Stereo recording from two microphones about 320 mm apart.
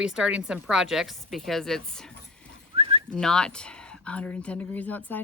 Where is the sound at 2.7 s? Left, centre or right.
Centre.